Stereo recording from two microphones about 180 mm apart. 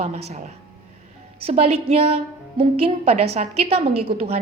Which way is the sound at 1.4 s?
35° right (ahead or behind).